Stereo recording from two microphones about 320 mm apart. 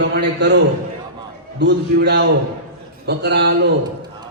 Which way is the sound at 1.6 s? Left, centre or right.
Right.